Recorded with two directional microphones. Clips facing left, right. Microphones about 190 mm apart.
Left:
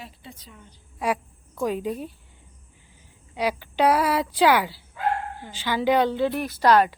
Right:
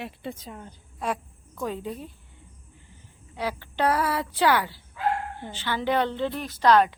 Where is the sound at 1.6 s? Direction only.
15° left (ahead or behind).